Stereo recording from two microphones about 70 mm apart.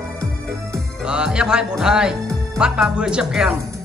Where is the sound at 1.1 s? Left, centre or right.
Centre.